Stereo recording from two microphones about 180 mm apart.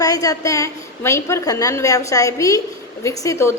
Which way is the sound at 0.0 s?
20° left (ahead or behind).